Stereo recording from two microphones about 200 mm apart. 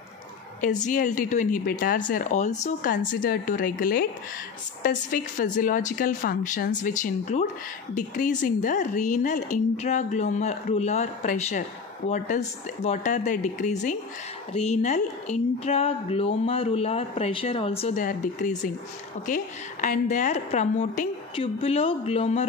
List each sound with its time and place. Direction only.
0.6 s speech: 40° left (ahead or behind)
21.4 s speech: 30° left (ahead or behind)